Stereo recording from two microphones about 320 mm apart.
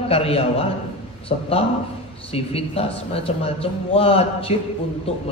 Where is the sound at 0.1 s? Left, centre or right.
Centre.